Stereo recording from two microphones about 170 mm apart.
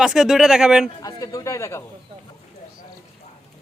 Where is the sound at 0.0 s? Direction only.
5° right (ahead or behind).